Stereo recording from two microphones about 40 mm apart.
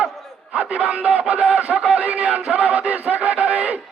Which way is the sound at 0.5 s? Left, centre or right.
Right.